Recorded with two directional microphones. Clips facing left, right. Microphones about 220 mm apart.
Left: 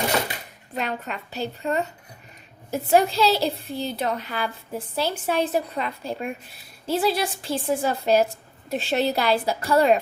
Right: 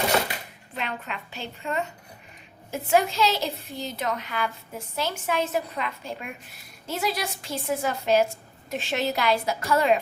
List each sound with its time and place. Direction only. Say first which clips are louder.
0.8 s a woman's voice: left 4 dB; 40° left (ahead or behind)